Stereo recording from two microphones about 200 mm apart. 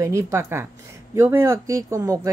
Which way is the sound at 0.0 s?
15° right (ahead or behind).